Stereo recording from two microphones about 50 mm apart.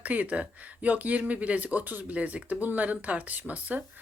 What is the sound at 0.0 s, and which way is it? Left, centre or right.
Speech, right.